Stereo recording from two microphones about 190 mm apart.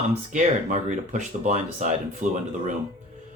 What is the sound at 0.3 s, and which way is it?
Speech, 40° right (ahead or behind).